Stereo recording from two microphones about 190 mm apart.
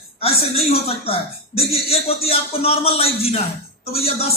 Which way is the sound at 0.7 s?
30° left (ahead or behind).